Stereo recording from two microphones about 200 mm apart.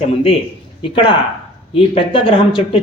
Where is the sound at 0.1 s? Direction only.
30° left (ahead or behind).